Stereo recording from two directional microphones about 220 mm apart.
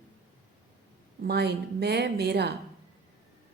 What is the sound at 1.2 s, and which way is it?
A woman's voice, 50° right (ahead or behind).